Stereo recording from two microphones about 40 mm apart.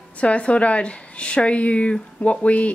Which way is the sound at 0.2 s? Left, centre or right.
Left.